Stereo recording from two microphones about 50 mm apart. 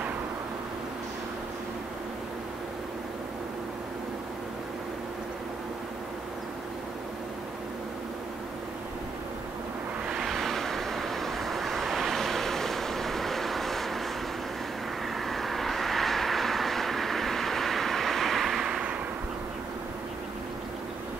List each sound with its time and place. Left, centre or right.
10.2 s vehicle: centre
15.1 s vehicle: centre
18.7 s a sound: centre